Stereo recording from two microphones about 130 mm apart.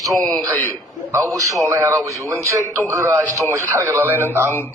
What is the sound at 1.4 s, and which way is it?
Speech, 25° right (ahead or behind).